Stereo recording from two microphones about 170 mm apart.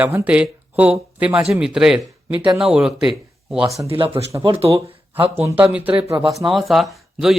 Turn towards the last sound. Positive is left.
turn(degrees=0)  # may be behind; listen again after turning